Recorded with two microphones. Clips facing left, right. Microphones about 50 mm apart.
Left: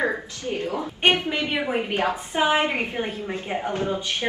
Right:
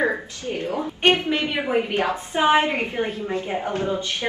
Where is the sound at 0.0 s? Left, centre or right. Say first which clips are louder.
Right 2 dB; right.